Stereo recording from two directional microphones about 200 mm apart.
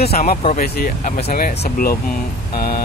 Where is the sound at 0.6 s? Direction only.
45° left (ahead or behind).